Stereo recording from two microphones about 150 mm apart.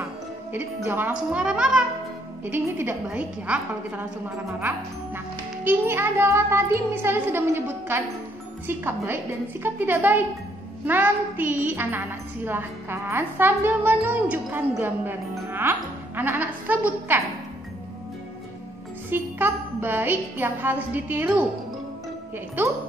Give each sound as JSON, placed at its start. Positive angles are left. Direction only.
{"t": 0.5, "sound": "a woman's voice", "side_deg": -15}
{"t": 19.0, "sound": "a woman's voice", "side_deg": -15}
{"t": 22.6, "sound": "a woman's voice", "side_deg": -15}